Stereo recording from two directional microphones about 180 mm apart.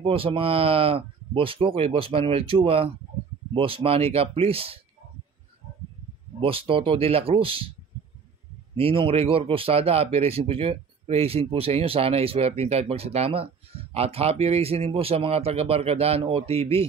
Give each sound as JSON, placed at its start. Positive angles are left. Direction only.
{"t": 0.0, "sound": "speech", "side_deg": -30}
{"t": 6.4, "sound": "speech", "side_deg": -30}
{"t": 8.7, "sound": "speech", "side_deg": -30}